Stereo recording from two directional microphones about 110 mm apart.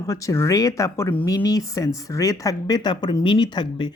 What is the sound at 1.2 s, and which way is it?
A woman's voice, 35° left (ahead or behind).